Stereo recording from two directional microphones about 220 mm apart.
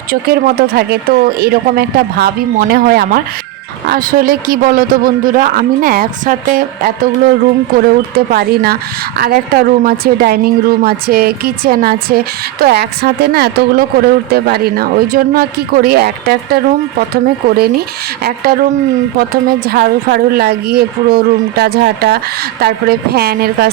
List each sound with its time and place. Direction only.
0.1 s a man's voice: 40° right (ahead or behind)
18.2 s speech: 45° right (ahead or behind)